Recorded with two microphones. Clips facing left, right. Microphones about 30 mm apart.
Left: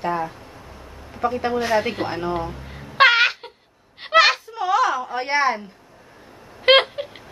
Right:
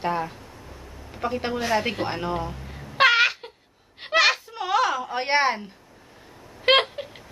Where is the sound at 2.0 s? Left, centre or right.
Centre.